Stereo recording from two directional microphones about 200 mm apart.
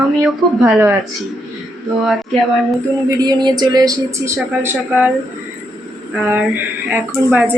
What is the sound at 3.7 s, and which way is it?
Speech, 15° right (ahead or behind).